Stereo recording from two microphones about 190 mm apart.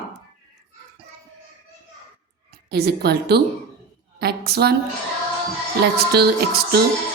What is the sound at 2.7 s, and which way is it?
A woman's voice, 55° right (ahead or behind).